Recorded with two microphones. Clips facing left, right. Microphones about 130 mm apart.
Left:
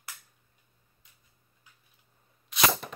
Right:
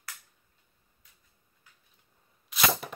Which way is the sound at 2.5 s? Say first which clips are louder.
Left 1 dB; 5° right (ahead or behind).